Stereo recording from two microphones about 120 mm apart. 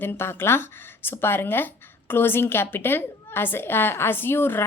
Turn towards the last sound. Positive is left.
turn(degrees=20)  # may be behind; listen again after turning